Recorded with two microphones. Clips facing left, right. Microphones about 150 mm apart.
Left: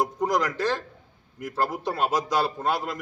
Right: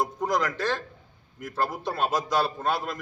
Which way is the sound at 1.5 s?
10° left (ahead or behind).